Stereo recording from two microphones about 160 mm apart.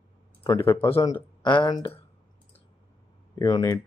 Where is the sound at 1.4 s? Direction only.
30° left (ahead or behind).